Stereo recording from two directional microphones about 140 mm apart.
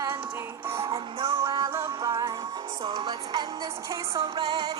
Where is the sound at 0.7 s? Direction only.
20° right (ahead or behind).